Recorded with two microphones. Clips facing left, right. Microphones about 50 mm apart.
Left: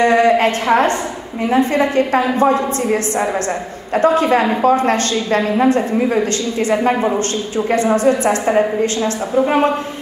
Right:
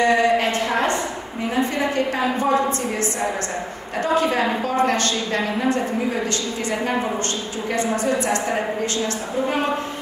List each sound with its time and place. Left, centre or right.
0.0 s a woman's voice: left